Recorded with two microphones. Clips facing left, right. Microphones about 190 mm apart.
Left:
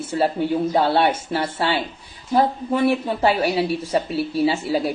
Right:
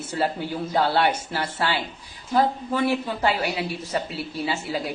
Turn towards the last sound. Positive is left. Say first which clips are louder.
# left 7 dB
turn(degrees=30)  # may be behind; listen again after turning